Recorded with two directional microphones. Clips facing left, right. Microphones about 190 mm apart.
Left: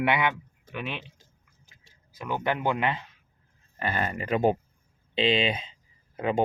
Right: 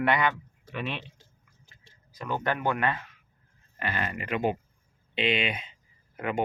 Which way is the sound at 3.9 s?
40° left (ahead or behind).